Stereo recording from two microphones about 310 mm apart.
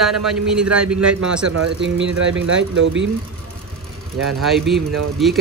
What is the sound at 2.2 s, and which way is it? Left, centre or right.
Speech, right.